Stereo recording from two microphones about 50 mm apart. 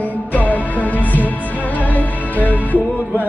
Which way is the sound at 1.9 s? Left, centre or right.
Left.